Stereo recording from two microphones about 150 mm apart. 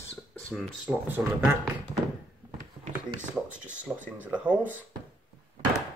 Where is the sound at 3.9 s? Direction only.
10° right (ahead or behind).